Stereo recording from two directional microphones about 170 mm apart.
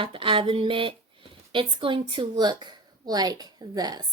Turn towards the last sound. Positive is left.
turn(degrees=-25)  # may be behind; listen again after turning